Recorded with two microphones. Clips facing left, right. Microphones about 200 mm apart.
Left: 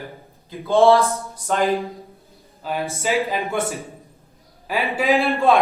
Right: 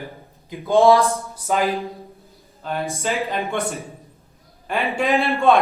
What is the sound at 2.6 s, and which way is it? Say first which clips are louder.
A man's voice: left 1 dB; 5° left (ahead or behind).